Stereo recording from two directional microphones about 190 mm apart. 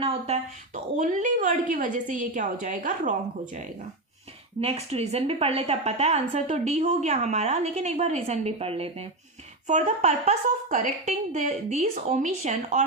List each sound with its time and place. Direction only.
0.0 s a woman's voice: 30° right (ahead or behind)
0.9 s a woman's voice: 40° right (ahead or behind)
4.6 s a woman's voice: 30° right (ahead or behind)